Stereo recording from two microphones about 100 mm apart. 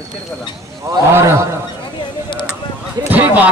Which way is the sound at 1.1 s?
25° right (ahead or behind).